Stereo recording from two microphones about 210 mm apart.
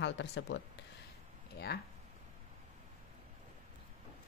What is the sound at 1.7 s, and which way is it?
Speech, 50° left (ahead or behind).